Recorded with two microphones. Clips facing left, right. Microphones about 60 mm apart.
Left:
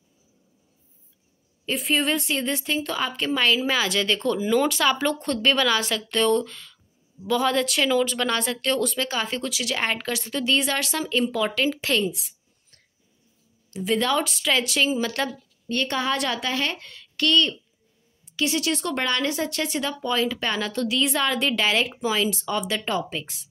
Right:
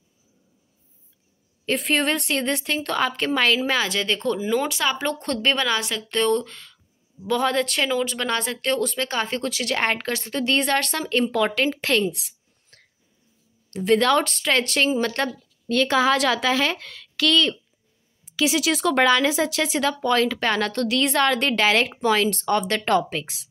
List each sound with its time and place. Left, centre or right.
1.7 s a woman's voice: right
3.9 s speech: centre
5.0 s a woman's voice: right
5.4 s a woman's voice: right
6.0 s a woman's voice: right
7.8 s a woman's voice: right
9.0 s a woman's voice: right
12.1 s a sound: right
13.7 s a woman's voice: right
15.7 s a woman's voice: right
22.8 s speech: right